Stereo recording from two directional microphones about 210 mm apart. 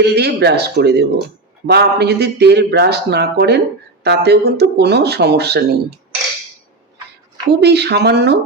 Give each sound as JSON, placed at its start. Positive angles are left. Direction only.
{"t": 0.0, "sound": "speech", "side_deg": -50}
{"t": 7.5, "sound": "speech", "side_deg": -50}